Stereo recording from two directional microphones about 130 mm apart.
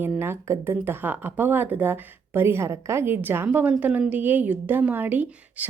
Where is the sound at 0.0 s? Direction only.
15° right (ahead or behind).